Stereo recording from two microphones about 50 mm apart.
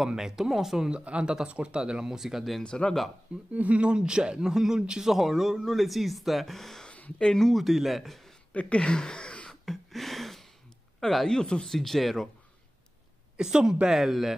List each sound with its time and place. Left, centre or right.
0.0 s speech: centre
2.6 s speech: centre
3.5 s speech: right
5.1 s speech: centre
7.5 s speech: centre
8.5 s speech: left
9.5 s a sound: centre
11.0 s speech: centre
13.4 s speech: centre